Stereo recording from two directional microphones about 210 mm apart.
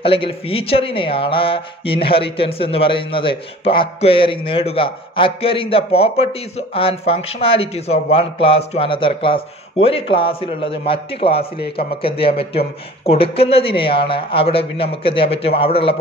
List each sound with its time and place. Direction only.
0.0 s a man's voice: 25° left (ahead or behind)